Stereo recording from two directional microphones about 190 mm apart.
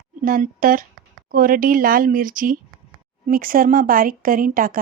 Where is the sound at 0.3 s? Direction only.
45° right (ahead or behind).